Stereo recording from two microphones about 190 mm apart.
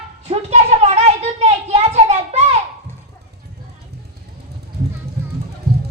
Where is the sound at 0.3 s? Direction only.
35° right (ahead or behind).